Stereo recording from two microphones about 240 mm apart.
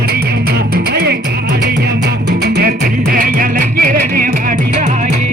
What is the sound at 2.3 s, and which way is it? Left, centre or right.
Music, right.